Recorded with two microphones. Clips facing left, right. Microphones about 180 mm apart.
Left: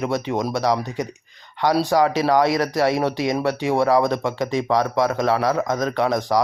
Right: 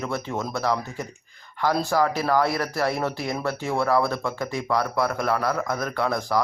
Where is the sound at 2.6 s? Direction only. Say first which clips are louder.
Left 6 dB; 20° left (ahead or behind).